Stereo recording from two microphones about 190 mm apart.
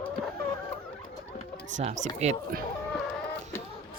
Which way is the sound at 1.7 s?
40° right (ahead or behind).